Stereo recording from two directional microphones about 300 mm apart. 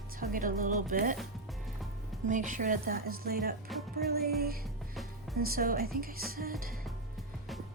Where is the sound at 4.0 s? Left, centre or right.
Right.